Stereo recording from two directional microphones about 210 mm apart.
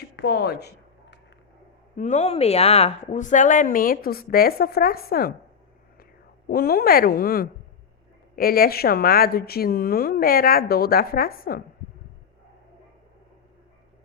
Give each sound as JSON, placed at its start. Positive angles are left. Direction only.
{"t": 0.2, "sound": "speech", "side_deg": 50}
{"t": 2.0, "sound": "a woman's voice", "side_deg": 35}
{"t": 6.5, "sound": "speech", "side_deg": 45}